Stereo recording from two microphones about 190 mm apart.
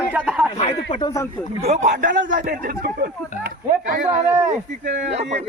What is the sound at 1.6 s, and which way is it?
A man's voice, 40° right (ahead or behind).